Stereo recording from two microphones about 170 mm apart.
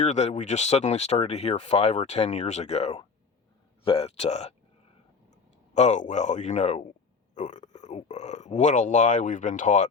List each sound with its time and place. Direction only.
0.0 s speech: 45° left (ahead or behind)
5.7 s speech: 45° left (ahead or behind)